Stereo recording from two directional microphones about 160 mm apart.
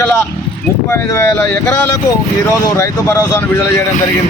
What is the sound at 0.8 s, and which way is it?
Speech, 15° left (ahead or behind).